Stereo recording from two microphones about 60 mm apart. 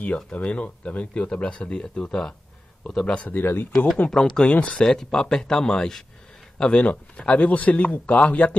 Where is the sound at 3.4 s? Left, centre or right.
Left.